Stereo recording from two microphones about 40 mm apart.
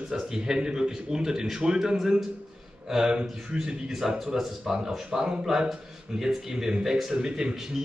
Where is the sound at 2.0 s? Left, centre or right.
Centre.